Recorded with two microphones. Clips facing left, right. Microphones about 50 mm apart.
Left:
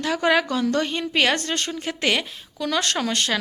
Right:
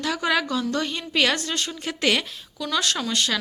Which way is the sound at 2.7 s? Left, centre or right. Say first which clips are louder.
Left 1 dB; left.